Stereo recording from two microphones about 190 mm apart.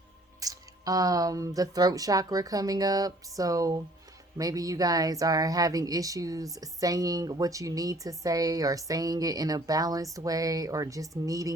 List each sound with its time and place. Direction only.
0.3 s speech: 20° right (ahead or behind)